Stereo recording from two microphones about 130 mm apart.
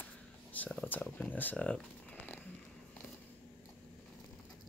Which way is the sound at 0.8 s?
10° left (ahead or behind).